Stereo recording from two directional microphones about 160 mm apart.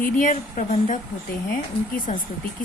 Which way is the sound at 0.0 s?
55° left (ahead or behind).